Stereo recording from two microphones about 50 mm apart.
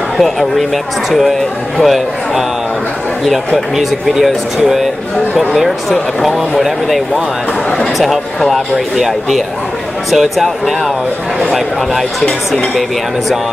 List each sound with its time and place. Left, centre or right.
0.2 s speech: centre
1.8 s a man's voice: centre
5.6 s speech: centre
11.5 s speech: centre